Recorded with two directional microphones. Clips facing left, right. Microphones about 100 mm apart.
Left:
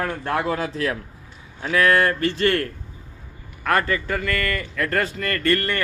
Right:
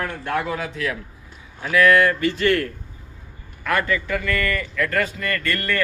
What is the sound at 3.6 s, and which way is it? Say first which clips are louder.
Speech: left 1 dB; 40° left (ahead or behind).